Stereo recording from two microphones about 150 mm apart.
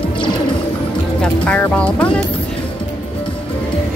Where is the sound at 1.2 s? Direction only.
10° left (ahead or behind).